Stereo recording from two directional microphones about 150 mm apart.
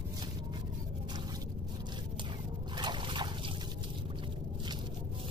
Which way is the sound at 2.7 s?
30° right (ahead or behind).